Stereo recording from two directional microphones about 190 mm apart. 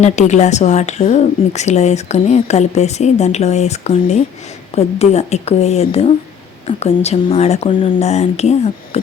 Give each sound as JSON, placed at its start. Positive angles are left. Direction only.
{"t": 0.0, "sound": "a woman's voice", "side_deg": 40}